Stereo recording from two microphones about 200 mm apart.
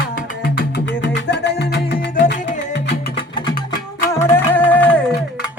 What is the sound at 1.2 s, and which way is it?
Music, 60° left (ahead or behind).